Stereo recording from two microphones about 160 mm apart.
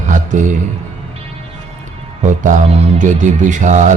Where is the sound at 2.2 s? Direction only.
55° right (ahead or behind).